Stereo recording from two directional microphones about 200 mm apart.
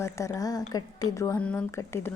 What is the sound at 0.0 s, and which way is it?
Speech, 15° left (ahead or behind).